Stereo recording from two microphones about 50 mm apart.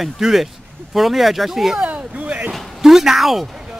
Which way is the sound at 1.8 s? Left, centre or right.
Right.